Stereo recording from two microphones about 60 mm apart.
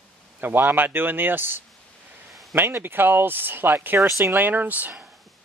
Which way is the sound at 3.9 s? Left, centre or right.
Right.